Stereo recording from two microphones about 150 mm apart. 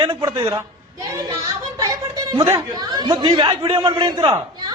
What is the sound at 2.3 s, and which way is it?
A man's voice, 25° right (ahead or behind).